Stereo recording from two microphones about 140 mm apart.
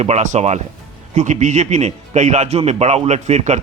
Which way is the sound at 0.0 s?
55° right (ahead or behind).